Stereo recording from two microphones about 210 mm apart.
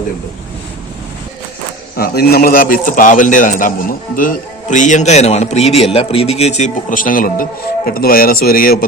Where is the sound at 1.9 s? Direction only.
45° left (ahead or behind).